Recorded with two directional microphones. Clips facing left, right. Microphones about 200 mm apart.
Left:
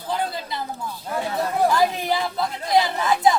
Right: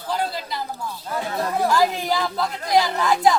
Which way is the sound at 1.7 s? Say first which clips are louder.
Right 1 dB; 25° left (ahead or behind).